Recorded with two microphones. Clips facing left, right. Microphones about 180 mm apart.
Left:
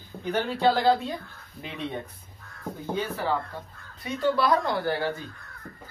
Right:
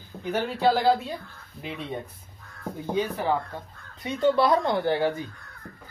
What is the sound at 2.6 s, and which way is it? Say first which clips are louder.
Speech: right 3 dB; 15° right (ahead or behind).